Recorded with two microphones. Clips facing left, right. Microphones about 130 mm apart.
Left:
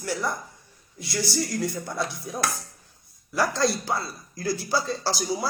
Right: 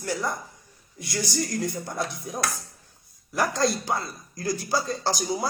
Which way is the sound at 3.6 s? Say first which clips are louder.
Even; 20° right (ahead or behind).